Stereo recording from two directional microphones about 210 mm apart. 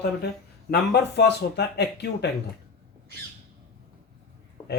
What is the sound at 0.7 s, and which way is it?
Speech, 50° left (ahead or behind).